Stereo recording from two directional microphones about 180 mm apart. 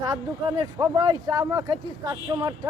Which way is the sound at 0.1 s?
20° right (ahead or behind).